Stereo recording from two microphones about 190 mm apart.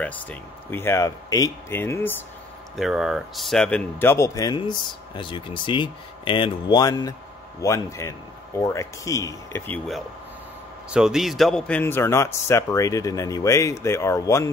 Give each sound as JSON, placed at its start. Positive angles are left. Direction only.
{"t": 0.0, "sound": "a man's voice", "side_deg": 10}
{"t": 2.7, "sound": "a man's voice", "side_deg": 0}
{"t": 10.9, "sound": "a man's voice", "side_deg": -5}